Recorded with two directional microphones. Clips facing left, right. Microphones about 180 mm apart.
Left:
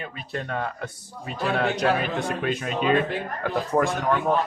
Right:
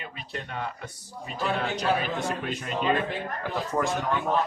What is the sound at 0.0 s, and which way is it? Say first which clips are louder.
Speech: left 5 dB; 50° left (ahead or behind).